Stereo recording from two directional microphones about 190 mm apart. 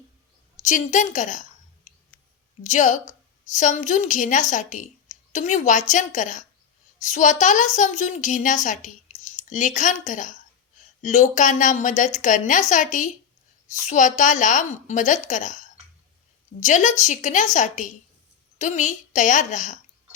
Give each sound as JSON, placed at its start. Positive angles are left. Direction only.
{"t": 0.6, "sound": "a woman's voice", "side_deg": 40}